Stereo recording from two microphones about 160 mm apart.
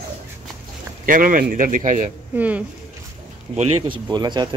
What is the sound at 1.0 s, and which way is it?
A man's voice, 60° right (ahead or behind).